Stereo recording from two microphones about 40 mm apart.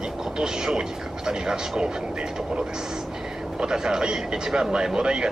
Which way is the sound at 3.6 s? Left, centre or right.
Centre.